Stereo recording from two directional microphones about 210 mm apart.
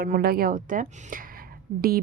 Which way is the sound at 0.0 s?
45° right (ahead or behind).